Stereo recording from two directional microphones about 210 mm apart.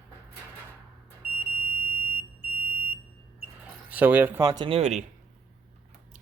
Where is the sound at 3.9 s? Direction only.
10° right (ahead or behind); by 5.0 s 30° right (ahead or behind).